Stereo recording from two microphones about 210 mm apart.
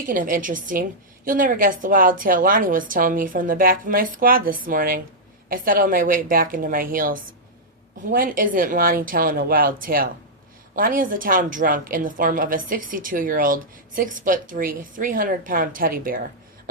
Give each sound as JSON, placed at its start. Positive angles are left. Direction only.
{"t": 0.0, "sound": "a woman's voice", "side_deg": -40}